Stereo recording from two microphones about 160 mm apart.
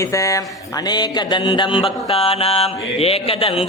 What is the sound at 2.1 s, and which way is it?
Mantra, 35° left (ahead or behind).